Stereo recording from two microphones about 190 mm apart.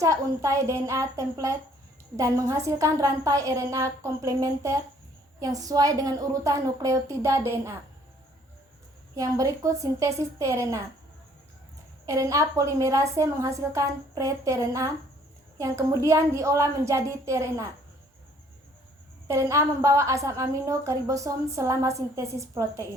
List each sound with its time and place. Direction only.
0.0 s a woman's voice: 15° right (ahead or behind)
9.1 s a woman's voice: 15° right (ahead or behind)
12.0 s a woman's voice: 15° right (ahead or behind)
19.3 s a woman's voice: 15° right (ahead or behind)